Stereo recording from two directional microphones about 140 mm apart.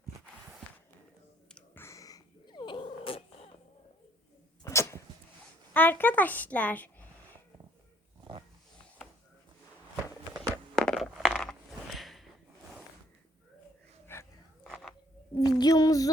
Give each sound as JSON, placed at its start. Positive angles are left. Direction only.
{"t": 1.5, "sound": "cat", "side_deg": 15}
{"t": 4.6, "sound": "dog", "side_deg": 20}
{"t": 5.7, "sound": "a child's voice", "side_deg": 15}
{"t": 10.8, "sound": "coin", "side_deg": 5}
{"t": 14.1, "sound": "dog", "side_deg": 15}
{"t": 14.6, "sound": "a sound", "side_deg": 5}
{"t": 15.4, "sound": "a sound", "side_deg": 30}